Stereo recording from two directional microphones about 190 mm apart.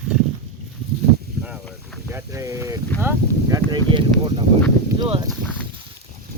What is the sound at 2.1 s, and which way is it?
Speech, 15° right (ahead or behind).